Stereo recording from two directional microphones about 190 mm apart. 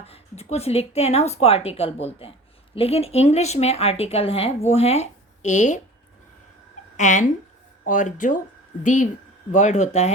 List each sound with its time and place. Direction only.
0.0 s speech: 30° left (ahead or behind)
6.9 s speech: 40° left (ahead or behind)